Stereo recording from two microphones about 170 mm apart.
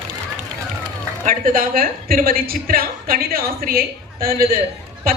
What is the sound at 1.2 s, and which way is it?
A woman's voice, 55° right (ahead or behind).